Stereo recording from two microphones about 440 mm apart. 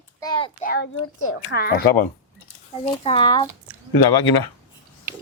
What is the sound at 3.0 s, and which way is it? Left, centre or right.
Speech, centre.